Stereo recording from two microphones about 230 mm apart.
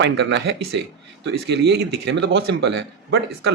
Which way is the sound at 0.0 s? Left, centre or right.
Right.